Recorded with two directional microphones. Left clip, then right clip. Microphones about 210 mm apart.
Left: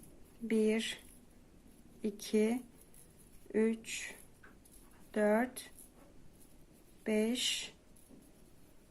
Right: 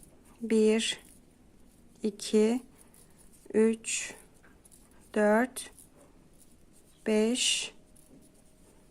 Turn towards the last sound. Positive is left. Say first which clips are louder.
# right 7 dB
turn(degrees=-30)  # may be behind; listen again after turning